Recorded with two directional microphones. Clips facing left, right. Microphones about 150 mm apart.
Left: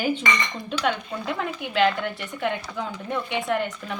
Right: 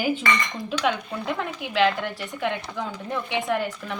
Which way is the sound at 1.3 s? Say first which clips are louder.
Even; centre (ahead or behind).